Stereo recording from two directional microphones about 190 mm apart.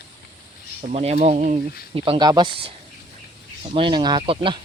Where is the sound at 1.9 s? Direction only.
30° right (ahead or behind).